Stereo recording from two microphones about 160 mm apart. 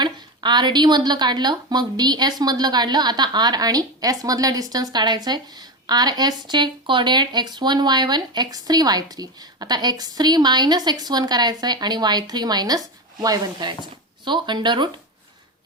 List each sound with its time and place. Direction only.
0.0 s a woman's voice: 30° right (ahead or behind)